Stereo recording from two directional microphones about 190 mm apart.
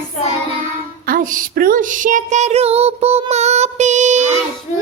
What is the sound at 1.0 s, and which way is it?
Female singing, 50° right (ahead or behind).